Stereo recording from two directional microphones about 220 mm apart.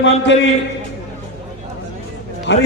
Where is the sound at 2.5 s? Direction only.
55° left (ahead or behind).